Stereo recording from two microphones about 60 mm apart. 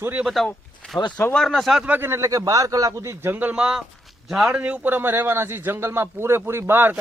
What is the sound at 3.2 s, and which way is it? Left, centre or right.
Speech, right.